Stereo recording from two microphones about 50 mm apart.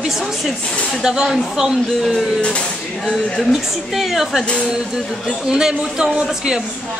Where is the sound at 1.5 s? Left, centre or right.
Centre.